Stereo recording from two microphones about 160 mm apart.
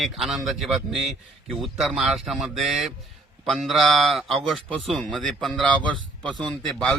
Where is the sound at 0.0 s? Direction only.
Centre (ahead or behind).